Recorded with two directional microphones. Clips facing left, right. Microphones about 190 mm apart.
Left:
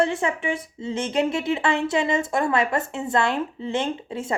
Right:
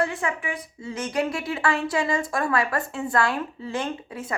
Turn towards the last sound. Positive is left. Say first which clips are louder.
# left 4 dB
turn(degrees=25)  # may be behind; listen again after turning